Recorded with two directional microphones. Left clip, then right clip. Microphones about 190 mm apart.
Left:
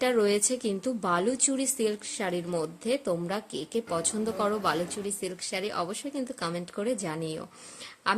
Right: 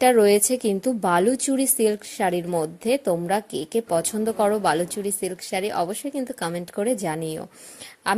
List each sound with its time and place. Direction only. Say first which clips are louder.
0.0 s a woman's voice: right 8 dB; 25° right (ahead or behind)